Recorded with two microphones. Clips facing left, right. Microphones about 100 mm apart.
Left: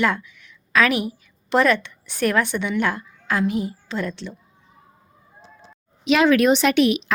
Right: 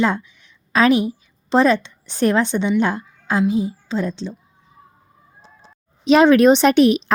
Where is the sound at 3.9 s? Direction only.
20° right (ahead or behind).